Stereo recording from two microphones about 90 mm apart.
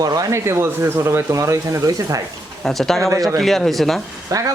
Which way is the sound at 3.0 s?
35° right (ahead or behind).